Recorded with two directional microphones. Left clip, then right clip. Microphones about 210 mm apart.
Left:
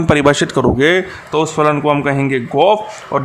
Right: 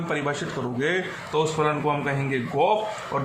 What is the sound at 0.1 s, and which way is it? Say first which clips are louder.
Speech: left 15 dB; 50° left (ahead or behind).